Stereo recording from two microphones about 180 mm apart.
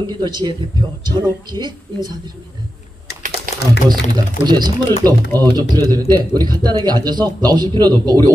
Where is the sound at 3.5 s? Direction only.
50° right (ahead or behind).